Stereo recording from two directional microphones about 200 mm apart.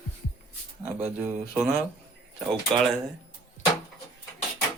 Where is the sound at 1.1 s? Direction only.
10° right (ahead or behind).